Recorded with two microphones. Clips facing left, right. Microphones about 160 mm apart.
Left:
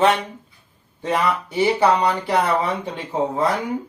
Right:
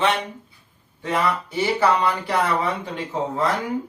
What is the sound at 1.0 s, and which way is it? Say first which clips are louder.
Speech: left 2 dB; 25° left (ahead or behind).